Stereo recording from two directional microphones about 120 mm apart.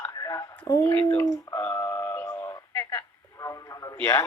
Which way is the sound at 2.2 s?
20° left (ahead or behind).